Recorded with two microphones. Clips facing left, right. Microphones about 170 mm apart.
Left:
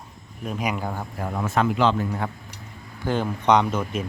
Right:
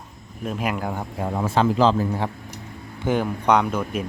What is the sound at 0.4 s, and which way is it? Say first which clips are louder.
Speech: right 2 dB; centre (ahead or behind).